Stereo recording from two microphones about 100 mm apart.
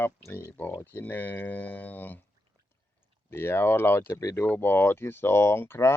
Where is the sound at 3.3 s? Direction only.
25° left (ahead or behind).